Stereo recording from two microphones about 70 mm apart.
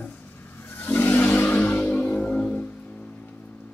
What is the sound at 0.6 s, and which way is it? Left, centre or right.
Vehicle, left.